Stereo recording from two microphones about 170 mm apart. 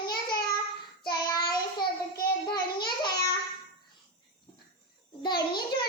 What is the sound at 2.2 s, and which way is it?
Child singing, 65° left (ahead or behind).